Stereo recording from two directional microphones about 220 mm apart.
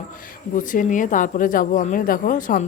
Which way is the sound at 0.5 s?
35° left (ahead or behind).